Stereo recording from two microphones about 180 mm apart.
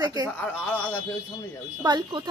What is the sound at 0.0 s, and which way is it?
Speech, 20° right (ahead or behind).